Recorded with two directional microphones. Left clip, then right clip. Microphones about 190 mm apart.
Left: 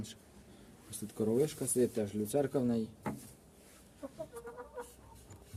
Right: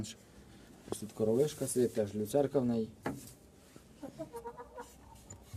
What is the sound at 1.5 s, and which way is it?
Speech, centre (ahead or behind).